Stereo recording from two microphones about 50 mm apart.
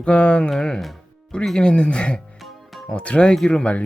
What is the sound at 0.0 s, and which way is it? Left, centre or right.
Speech, left.